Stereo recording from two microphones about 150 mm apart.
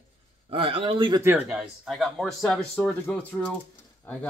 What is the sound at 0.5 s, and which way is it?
Speech, 35° right (ahead or behind).